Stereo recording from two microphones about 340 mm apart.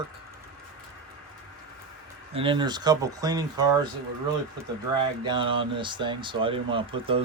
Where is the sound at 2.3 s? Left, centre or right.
Centre.